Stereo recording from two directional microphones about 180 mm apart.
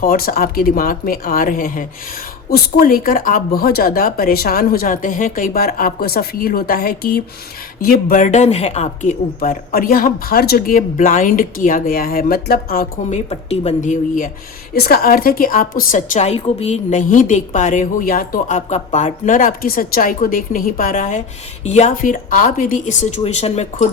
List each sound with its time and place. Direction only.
0.0 s speech: 55° left (ahead or behind)
14.8 s a woman's voice: 55° left (ahead or behind); by 23.9 s 40° left (ahead or behind)